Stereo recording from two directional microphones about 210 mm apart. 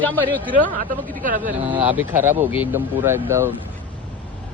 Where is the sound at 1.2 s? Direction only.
40° right (ahead or behind).